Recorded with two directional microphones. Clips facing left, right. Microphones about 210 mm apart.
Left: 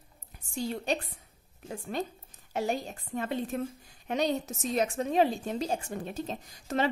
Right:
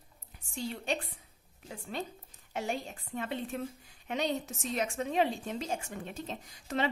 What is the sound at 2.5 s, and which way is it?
A woman's voice, 40° left (ahead or behind).